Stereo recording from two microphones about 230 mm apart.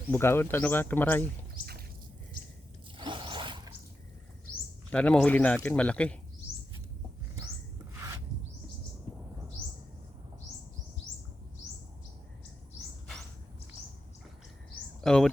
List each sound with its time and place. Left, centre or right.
0.1 s speech: centre
3.0 s a sound: right
4.9 s a man's voice: centre
15.0 s speech: centre